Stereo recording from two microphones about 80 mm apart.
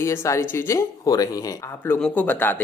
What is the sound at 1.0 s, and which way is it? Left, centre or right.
Speech, left.